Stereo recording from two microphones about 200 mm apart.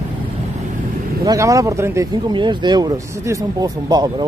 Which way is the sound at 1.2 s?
15° right (ahead or behind).